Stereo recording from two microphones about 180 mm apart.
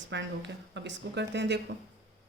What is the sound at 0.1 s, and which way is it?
Speech, 75° right (ahead or behind).